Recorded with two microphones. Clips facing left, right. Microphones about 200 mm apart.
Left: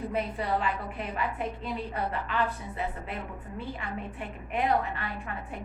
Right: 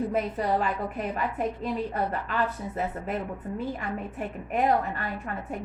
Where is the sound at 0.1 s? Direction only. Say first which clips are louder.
Right 3 dB; 45° right (ahead or behind).